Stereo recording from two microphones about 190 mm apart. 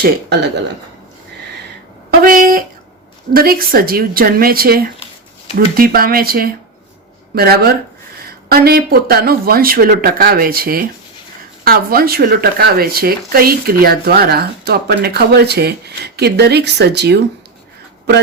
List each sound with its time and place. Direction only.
0.0 s speech: 60° right (ahead or behind)
2.0 s a sound: 50° right (ahead or behind)
3.3 s speech: 50° right (ahead or behind)